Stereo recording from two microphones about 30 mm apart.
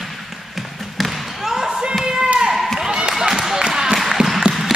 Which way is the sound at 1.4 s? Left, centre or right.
Centre.